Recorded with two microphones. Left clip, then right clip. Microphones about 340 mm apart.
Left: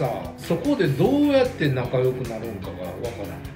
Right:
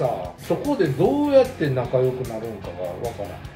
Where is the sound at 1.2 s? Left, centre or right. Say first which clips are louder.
Right 3 dB; centre.